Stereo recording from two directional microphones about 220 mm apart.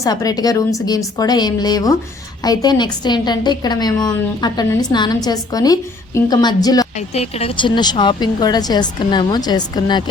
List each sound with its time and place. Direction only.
0.0 s a woman's voice: 15° left (ahead or behind)
7.1 s speech: 30° left (ahead or behind)